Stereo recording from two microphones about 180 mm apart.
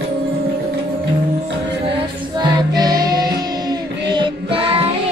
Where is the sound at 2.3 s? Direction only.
25° right (ahead or behind).